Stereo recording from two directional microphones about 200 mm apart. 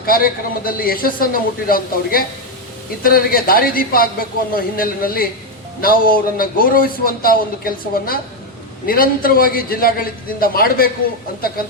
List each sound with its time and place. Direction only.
0.0 s a man's voice: 45° left (ahead or behind)